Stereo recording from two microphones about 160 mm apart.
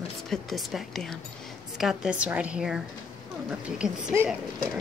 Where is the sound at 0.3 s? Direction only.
Centre (ahead or behind).